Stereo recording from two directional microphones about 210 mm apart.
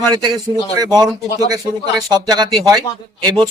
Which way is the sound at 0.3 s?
20° right (ahead or behind).